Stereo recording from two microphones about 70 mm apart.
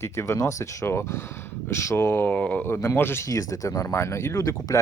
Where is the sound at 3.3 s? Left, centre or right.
Left.